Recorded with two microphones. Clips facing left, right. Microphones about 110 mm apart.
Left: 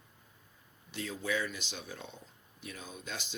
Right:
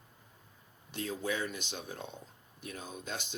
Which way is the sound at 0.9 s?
40° right (ahead or behind).